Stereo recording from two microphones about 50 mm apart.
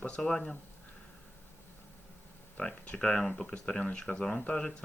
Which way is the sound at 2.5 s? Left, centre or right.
Left.